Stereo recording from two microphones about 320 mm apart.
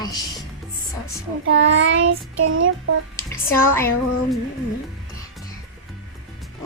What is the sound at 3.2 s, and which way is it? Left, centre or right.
Speech, centre.